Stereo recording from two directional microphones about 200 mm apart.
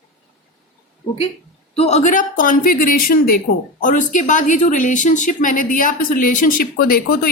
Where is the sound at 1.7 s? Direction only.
30° left (ahead or behind).